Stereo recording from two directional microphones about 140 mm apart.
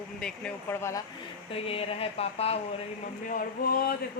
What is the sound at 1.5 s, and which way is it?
Speech, 45° left (ahead or behind).